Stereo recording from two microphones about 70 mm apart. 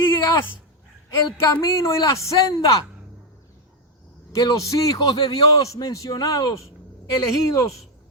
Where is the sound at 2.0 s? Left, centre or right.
Left.